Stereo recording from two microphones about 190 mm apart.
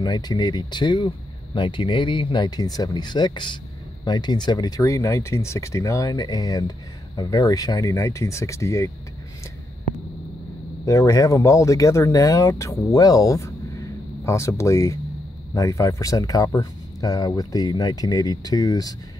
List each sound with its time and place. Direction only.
0.0 s speech: 20° left (ahead or behind)
10.9 s speech: 20° left (ahead or behind)